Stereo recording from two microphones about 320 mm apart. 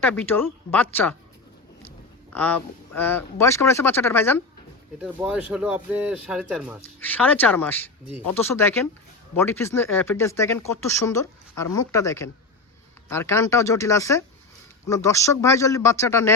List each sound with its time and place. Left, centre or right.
0.0 s speech: centre
2.3 s speech: centre